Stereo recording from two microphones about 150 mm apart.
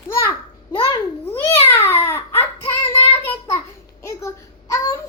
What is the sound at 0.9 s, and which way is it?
Babbling, 15° left (ahead or behind).